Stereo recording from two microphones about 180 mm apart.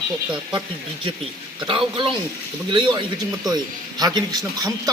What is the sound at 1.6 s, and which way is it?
Speech, 30° right (ahead or behind).